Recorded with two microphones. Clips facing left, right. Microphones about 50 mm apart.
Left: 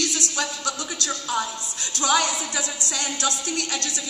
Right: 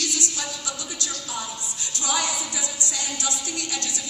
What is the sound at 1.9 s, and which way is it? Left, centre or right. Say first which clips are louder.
Music: left 5 dB; left.